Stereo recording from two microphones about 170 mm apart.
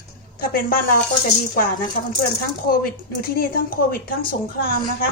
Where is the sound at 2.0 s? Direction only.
55° left (ahead or behind).